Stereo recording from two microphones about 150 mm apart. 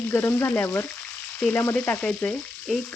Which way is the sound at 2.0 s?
5° left (ahead or behind).